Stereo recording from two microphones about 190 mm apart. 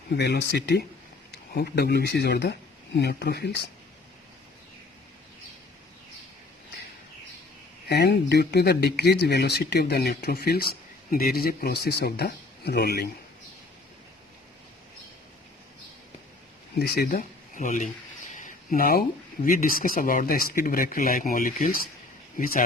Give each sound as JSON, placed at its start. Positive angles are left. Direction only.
{"t": 0.2, "sound": "speech", "side_deg": 65}
{"t": 7.9, "sound": "speech", "side_deg": 60}
{"t": 16.7, "sound": "speech", "side_deg": 55}